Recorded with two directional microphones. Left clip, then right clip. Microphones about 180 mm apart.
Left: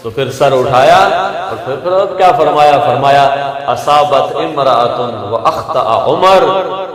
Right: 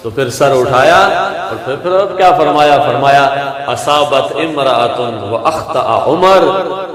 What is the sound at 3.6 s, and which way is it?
A man's voice, 30° right (ahead or behind).